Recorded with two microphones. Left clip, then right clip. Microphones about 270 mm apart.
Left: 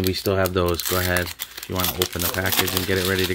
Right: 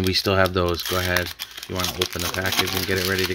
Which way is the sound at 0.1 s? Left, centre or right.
Centre.